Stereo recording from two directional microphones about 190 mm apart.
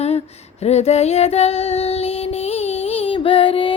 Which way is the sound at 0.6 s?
35° left (ahead or behind).